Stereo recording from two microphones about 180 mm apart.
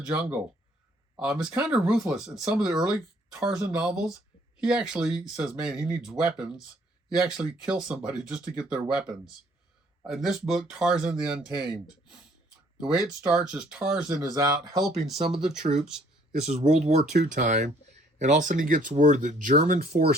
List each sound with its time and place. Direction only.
0.1 s speech: 10° right (ahead or behind)
14.2 s speech: 20° right (ahead or behind)
14.9 s speech: centre (ahead or behind)
16.5 s speech: 35° right (ahead or behind); by 20.1 s 60° right (ahead or behind)